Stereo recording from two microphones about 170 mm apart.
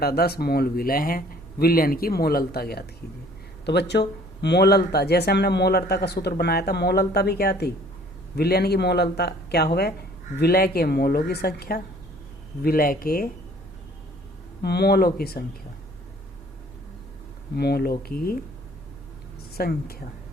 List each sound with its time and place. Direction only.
0.0 s speech: 65° left (ahead or behind)
3.7 s speech: 80° left; by 13.3 s 60° left (ahead or behind)
14.6 s speech: 75° left (ahead or behind)
17.5 s speech: 70° left (ahead or behind)
18.1 s speech: 60° left (ahead or behind)
19.5 s speech: 65° left (ahead or behind)